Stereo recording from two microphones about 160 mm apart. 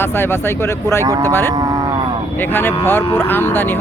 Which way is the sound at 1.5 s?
25° right (ahead or behind).